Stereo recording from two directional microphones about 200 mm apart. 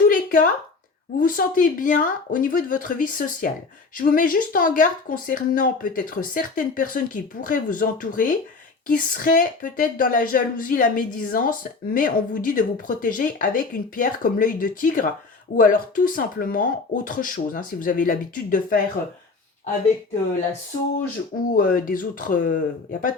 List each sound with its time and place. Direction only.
0.1 s a sound: 45° left (ahead or behind)
1.2 s speech: 45° left (ahead or behind)
21.5 s speech: 45° left (ahead or behind)